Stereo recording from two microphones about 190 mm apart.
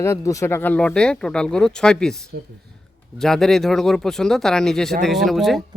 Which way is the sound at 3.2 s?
Centre (ahead or behind).